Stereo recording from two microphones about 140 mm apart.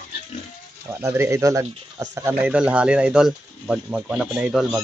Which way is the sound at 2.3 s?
10° right (ahead or behind).